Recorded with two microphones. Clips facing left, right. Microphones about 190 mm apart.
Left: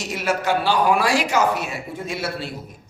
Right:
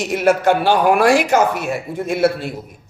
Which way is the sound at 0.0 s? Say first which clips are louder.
Right 8 dB; 55° right (ahead or behind).